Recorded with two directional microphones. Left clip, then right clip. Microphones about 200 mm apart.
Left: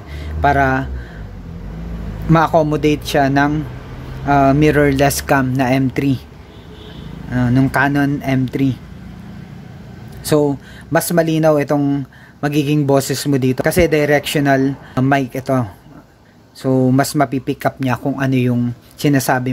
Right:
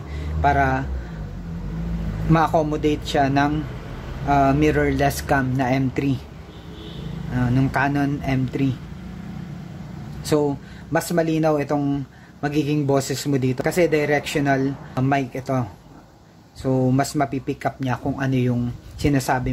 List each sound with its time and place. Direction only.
0.4 s speech: 30° left (ahead or behind)
2.3 s speech: 30° left (ahead or behind)
7.3 s speech: 30° left (ahead or behind)
10.2 s speech: 30° left (ahead or behind)